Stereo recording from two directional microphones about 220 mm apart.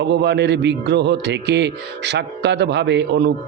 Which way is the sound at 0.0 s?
50° right (ahead or behind).